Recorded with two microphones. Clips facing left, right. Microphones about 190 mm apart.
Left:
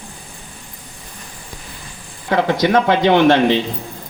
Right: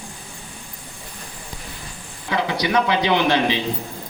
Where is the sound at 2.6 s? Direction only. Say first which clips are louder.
Left 5 dB; 50° left (ahead or behind).